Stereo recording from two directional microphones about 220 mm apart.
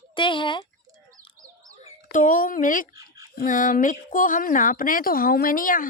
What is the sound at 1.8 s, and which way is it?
Speech, 35° left (ahead or behind).